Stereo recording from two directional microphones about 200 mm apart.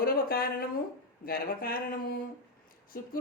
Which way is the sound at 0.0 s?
50° left (ahead or behind).